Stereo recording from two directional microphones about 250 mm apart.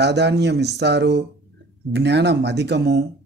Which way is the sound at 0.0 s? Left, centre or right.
Right.